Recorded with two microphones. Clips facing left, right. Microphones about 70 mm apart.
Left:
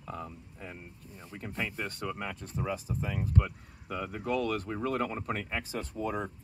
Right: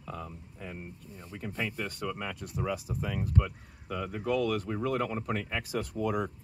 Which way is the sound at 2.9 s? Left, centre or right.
Right.